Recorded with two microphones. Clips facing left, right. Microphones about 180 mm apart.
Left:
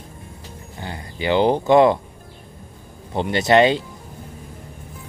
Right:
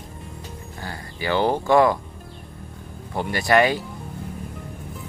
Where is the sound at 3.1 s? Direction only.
20° left (ahead or behind).